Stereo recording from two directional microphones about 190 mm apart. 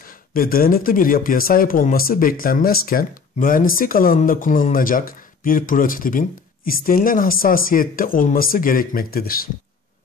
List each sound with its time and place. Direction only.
0.0 s speech: 50° left (ahead or behind)